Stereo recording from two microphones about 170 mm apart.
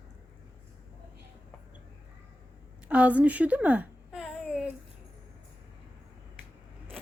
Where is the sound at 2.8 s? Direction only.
10° right (ahead or behind).